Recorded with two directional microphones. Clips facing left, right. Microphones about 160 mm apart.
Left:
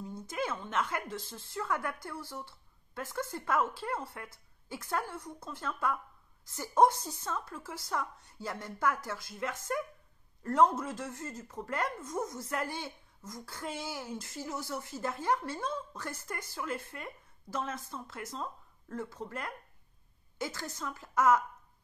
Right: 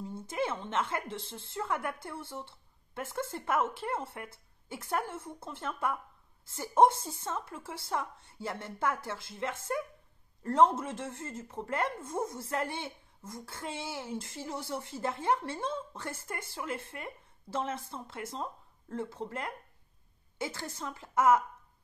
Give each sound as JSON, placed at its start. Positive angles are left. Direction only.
{"t": 0.0, "sound": "speech", "side_deg": -25}